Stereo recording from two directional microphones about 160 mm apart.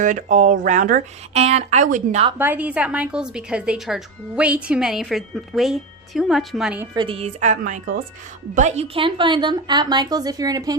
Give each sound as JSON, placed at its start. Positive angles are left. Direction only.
{"t": 0.0, "sound": "speech", "side_deg": -55}
{"t": 2.4, "sound": "speech", "side_deg": -10}
{"t": 6.9, "sound": "speech", "side_deg": -30}
{"t": 8.5, "sound": "a woman's voice", "side_deg": -45}